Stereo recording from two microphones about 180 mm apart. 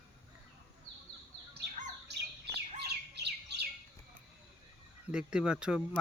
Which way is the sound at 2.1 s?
65° right (ahead or behind).